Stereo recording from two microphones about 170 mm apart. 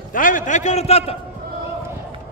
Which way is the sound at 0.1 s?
50° left (ahead or behind).